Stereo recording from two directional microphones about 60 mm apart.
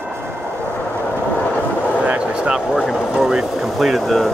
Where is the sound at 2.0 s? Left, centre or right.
Centre.